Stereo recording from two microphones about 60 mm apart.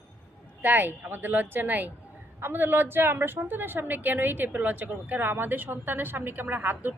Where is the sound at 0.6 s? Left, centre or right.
Right.